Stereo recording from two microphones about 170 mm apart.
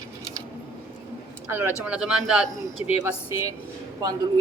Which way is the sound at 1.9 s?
5° right (ahead or behind).